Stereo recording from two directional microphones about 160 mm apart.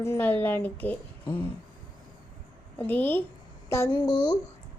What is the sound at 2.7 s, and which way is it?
Speech, 10° left (ahead or behind).